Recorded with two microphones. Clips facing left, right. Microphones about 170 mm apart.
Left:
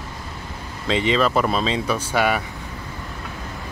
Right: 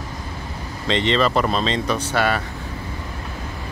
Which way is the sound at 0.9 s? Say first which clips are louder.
Even; 5° left (ahead or behind).